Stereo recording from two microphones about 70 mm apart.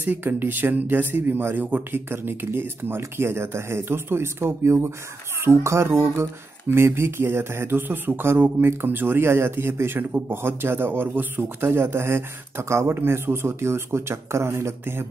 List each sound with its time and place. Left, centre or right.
0.0 s speech: right